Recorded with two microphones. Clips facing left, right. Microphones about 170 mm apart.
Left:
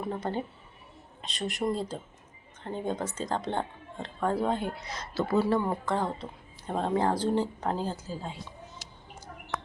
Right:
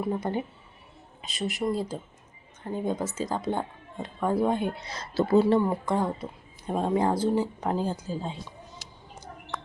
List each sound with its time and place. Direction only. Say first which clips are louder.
0.0 s speech: right 3 dB; 10° right (ahead or behind); by 5.4 s 30° right (ahead or behind)
5.4 s speech: right 3 dB; 15° right (ahead or behind)
9.5 s a sound: left 2 dB; centre (ahead or behind)